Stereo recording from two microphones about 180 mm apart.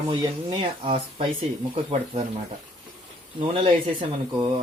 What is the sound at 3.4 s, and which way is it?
Speech, 30° right (ahead or behind).